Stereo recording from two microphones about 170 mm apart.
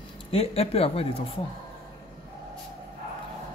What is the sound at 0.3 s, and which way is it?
Speech, 35° left (ahead or behind).